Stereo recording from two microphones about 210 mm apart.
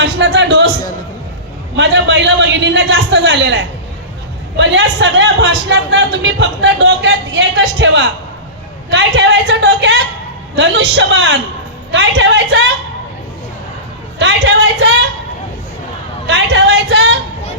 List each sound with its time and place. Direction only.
0.0 s a man's voice: 55° right (ahead or behind)
1.7 s a man's voice: 55° right (ahead or behind)
14.2 s a man's voice: 55° right (ahead or behind)
16.2 s a man's voice: 55° right (ahead or behind)